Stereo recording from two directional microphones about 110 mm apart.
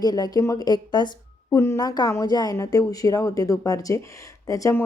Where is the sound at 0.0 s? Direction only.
35° left (ahead or behind).